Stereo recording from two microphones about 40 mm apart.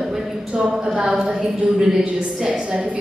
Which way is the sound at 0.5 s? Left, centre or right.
Right.